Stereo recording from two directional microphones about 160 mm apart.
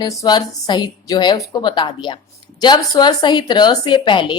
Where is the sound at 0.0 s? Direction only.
25° left (ahead or behind).